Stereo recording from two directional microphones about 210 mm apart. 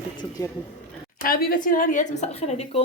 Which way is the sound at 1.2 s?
45° left (ahead or behind).